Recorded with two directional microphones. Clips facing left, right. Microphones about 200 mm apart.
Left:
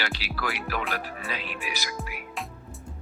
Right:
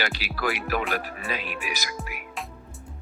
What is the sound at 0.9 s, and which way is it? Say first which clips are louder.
Speech: right 3 dB; 15° right (ahead or behind).